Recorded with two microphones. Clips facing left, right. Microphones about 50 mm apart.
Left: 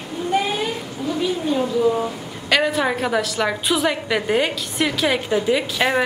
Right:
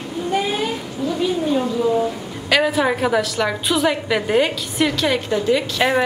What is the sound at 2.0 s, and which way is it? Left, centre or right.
A woman's voice, centre.